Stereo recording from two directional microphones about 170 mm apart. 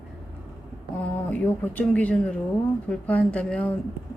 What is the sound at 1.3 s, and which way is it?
Speech, 10° left (ahead or behind).